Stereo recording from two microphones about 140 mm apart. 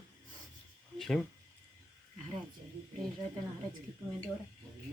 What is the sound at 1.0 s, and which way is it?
Speech, 5° left (ahead or behind).